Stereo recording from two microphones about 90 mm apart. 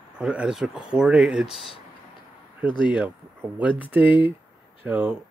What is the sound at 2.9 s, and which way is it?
Speech, 15° right (ahead or behind).